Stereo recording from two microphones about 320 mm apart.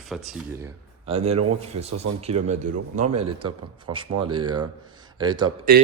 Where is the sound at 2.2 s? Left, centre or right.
Centre.